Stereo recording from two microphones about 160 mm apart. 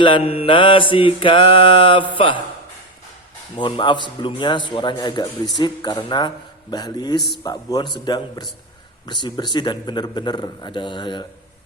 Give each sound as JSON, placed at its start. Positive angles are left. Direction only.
{"t": 0.0, "sound": "mantra", "side_deg": 35}
{"t": 3.6, "sound": "a man's voice", "side_deg": 30}